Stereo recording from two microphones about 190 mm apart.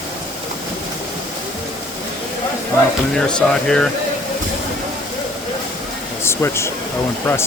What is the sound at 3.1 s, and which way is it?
Speech, 5° left (ahead or behind).